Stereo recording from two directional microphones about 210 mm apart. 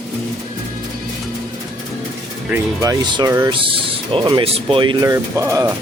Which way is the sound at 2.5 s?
15° right (ahead or behind).